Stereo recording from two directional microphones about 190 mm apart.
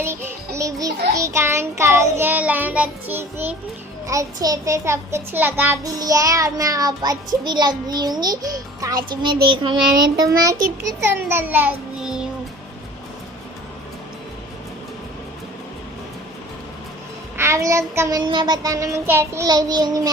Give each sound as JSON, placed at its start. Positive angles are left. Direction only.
{"t": 0.0, "sound": "music", "side_deg": -15}
{"t": 4.0, "sound": "a child's voice", "side_deg": -15}
{"t": 17.3, "sound": "child singing", "side_deg": -15}
{"t": 18.3, "sound": "a child's voice", "side_deg": -25}